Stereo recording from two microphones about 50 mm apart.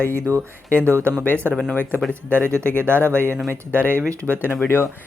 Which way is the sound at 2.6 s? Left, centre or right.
Right.